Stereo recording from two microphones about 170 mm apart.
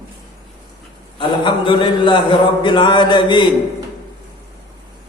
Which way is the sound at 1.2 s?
30° left (ahead or behind).